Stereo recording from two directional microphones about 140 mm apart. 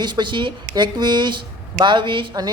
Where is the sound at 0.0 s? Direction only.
35° right (ahead or behind).